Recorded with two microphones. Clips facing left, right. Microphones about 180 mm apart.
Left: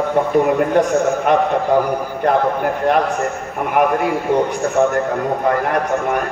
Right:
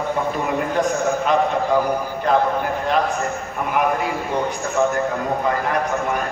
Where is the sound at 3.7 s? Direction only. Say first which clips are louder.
Left 5 dB; 60° left (ahead or behind).